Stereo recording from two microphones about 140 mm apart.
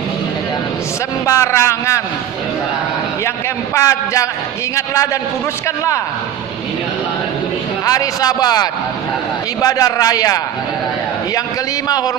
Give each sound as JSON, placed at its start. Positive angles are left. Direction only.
{"t": 1.2, "sound": "speech", "side_deg": 20}
{"t": 3.7, "sound": "speech", "side_deg": 25}
{"t": 7.8, "sound": "speech", "side_deg": 25}